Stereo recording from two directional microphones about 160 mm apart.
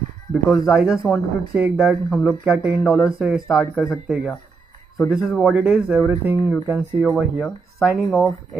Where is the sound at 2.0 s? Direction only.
5° left (ahead or behind).